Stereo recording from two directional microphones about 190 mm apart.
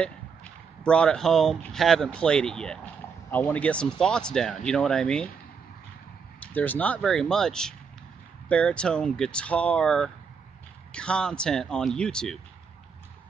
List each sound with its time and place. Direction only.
0.0 s speech: 5° left (ahead or behind)
6.4 s speech: 10° left (ahead or behind)